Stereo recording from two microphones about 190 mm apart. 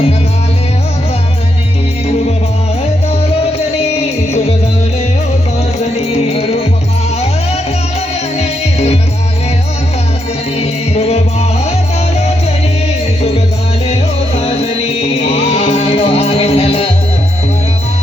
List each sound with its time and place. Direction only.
3.1 s music: 35° left (ahead or behind)
5.8 s music: 30° left (ahead or behind)
8.4 s music: 35° left (ahead or behind)
10.6 s music: 35° left (ahead or behind)
13.8 s music: 35° left (ahead or behind)